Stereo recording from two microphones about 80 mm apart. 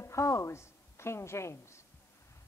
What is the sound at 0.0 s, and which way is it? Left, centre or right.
A woman's voice, left.